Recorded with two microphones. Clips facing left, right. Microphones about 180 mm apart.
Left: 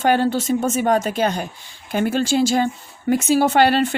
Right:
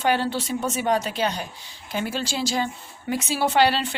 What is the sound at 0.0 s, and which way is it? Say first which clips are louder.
Speech: left 5 dB; 45° left (ahead or behind).